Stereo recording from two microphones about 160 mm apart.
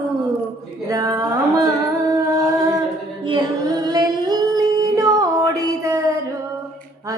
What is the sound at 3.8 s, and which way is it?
Singing, 25° right (ahead or behind).